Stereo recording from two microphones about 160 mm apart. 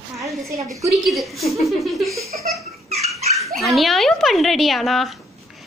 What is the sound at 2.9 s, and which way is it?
Dog, 40° right (ahead or behind).